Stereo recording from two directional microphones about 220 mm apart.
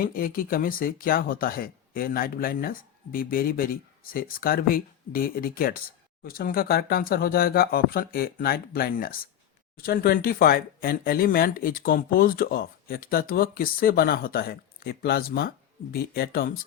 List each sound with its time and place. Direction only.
0.0 s speech: 40° left (ahead or behind)